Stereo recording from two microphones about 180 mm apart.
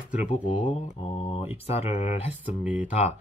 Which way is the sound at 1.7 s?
35° left (ahead or behind).